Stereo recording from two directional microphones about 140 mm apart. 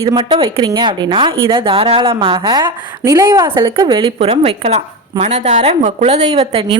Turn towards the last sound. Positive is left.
turn(degrees=-40)  # may be behind; listen again after turning